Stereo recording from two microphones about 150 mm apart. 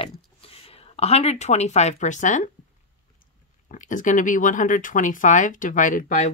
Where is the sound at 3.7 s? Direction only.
55° left (ahead or behind).